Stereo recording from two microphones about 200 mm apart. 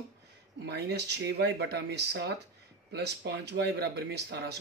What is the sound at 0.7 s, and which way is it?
Speech, 55° right (ahead or behind).